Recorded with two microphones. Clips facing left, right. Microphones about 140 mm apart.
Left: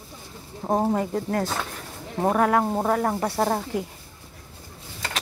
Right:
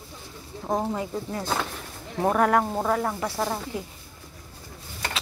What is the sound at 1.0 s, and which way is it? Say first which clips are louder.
Speech: left 5 dB; 55° left (ahead or behind).